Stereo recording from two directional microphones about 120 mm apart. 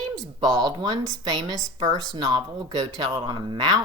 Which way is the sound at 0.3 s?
35° right (ahead or behind).